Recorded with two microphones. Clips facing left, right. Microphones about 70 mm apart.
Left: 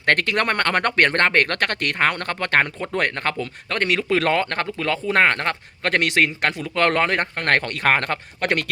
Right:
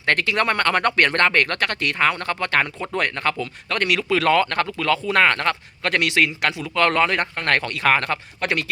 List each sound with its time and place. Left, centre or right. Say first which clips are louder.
0.0 s speech: even; left